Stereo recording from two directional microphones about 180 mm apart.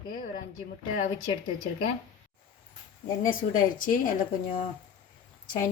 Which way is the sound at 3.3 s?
50° left (ahead or behind).